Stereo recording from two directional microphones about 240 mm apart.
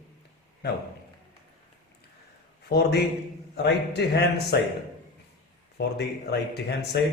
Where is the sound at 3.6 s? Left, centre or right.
Left.